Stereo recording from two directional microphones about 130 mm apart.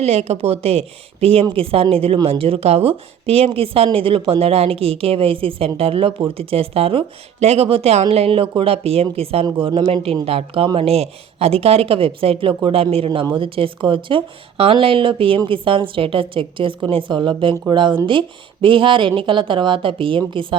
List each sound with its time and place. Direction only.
0.0 s a woman's voice: 55° right (ahead or behind)
13.1 s a woman's voice: 35° right (ahead or behind)